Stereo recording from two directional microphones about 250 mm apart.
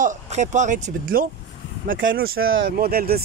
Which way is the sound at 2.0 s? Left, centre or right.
Right.